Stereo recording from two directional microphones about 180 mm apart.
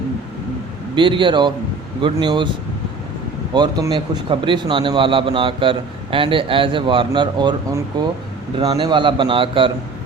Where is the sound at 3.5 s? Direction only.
25° right (ahead or behind).